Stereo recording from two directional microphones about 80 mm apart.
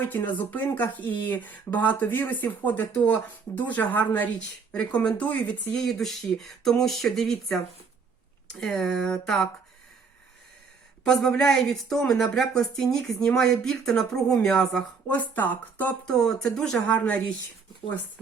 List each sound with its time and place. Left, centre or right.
0.0 s speech: left
5.8 s speech: centre
8.6 s speech: centre
11.0 s speech: centre
16.0 s speech: centre